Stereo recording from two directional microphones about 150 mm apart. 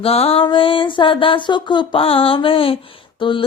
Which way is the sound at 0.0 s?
40° left (ahead or behind).